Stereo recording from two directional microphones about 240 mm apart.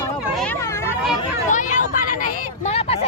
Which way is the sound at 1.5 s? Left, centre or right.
Left.